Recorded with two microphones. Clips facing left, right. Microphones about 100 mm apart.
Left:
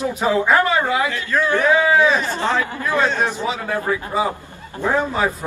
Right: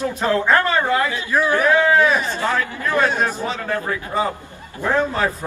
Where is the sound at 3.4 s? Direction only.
10° left (ahead or behind).